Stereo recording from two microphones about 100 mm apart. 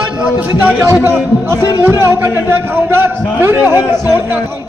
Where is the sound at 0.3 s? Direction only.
20° right (ahead or behind).